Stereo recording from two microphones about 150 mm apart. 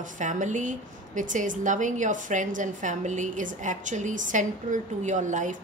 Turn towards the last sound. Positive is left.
turn(degrees=-55)  # may be behind; listen again after turning